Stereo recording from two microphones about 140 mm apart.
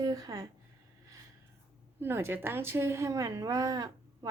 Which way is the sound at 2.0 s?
15° right (ahead or behind).